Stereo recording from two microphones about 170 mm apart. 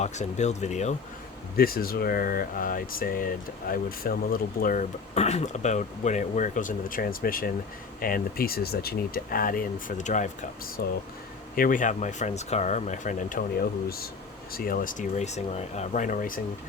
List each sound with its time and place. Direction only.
0.0 s speech: 45° left (ahead or behind)
1.5 s speech: 60° left (ahead or behind); by 10.2 s 45° left (ahead or behind)
10.8 s speech: 60° left (ahead or behind)
14.5 s speech: 55° left (ahead or behind)